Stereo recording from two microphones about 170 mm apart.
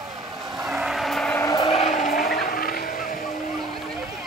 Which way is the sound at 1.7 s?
40° left (ahead or behind).